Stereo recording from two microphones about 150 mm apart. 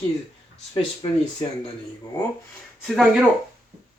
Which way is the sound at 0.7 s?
35° left (ahead or behind).